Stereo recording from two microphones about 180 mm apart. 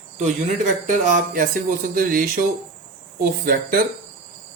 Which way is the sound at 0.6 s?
40° right (ahead or behind).